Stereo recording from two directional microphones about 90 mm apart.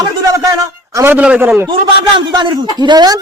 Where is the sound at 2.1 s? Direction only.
60° right (ahead or behind).